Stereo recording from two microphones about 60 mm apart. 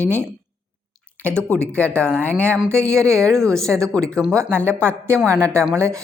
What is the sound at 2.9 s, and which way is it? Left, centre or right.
Speech, right.